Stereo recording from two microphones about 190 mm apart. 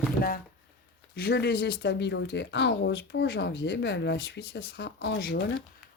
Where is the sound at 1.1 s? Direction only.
55° left (ahead or behind).